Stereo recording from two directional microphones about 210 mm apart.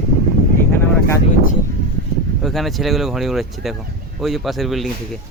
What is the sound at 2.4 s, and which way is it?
Speech, centre (ahead or behind).